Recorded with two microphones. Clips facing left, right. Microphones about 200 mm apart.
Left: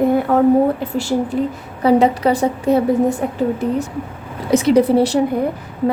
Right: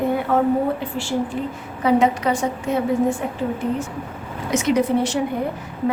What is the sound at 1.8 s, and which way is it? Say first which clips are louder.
A woman's voice: left 4 dB; 35° left (ahead or behind).